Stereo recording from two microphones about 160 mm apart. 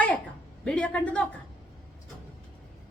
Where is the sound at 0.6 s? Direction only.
10° left (ahead or behind).